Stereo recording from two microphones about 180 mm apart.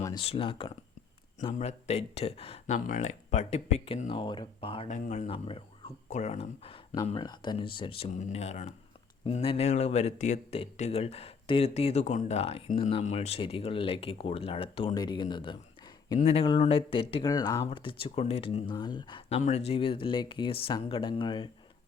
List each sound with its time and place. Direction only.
0.0 s speech: 25° left (ahead or behind)
2.7 s speech: 45° left (ahead or behind)
4.9 s speech: 40° left (ahead or behind); by 15.5 s 25° left (ahead or behind)
16.1 s speech: 35° left (ahead or behind); by 17.7 s 20° left (ahead or behind)
17.7 s speech: 30° left (ahead or behind)
19.4 s speech: 35° left (ahead or behind)